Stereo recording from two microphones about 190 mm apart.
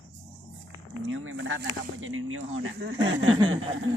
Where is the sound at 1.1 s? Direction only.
85° right.